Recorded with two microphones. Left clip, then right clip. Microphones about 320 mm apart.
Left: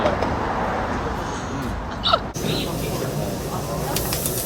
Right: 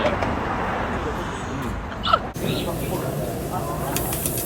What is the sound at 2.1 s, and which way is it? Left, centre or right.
Speech, centre.